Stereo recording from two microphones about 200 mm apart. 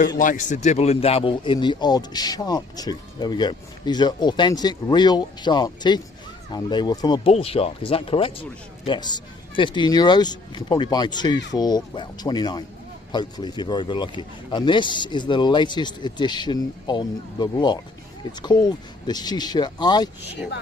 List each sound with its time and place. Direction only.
0.2 s speech: 40° left (ahead or behind); by 20.1 s 20° left (ahead or behind)